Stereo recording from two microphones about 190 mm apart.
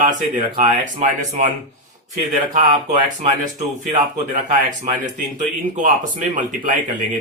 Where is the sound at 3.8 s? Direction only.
40° right (ahead or behind).